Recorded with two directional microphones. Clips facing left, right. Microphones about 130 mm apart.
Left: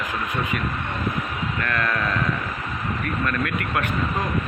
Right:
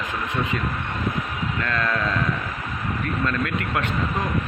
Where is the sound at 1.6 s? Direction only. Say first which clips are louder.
Even; 20° right (ahead or behind).